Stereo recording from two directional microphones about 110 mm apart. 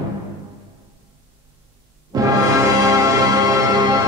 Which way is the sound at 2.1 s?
30° right (ahead or behind).